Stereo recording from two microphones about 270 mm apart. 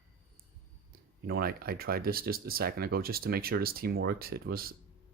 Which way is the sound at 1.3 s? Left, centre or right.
Right.